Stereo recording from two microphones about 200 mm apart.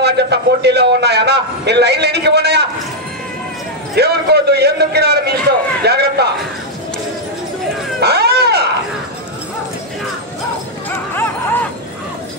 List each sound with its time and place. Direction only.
0.0 s a man's voice: 55° right (ahead or behind)
3.9 s a man's voice: 55° right (ahead or behind)
8.0 s wild animals: 55° right (ahead or behind)
10.9 s dog: 10° left (ahead or behind)